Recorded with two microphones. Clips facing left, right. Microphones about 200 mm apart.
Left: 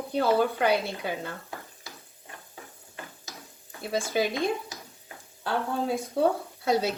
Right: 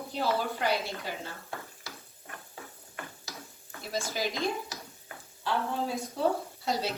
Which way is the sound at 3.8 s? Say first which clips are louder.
Left 6 dB; 60° left (ahead or behind).